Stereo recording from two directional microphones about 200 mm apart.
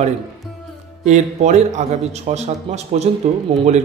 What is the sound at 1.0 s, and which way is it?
A man's voice, 35° right (ahead or behind).